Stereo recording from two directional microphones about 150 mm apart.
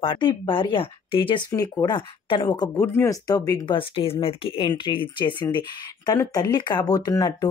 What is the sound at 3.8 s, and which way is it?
Speech, 35° left (ahead or behind).